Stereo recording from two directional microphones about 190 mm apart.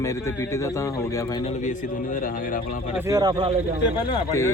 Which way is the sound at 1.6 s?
45° left (ahead or behind).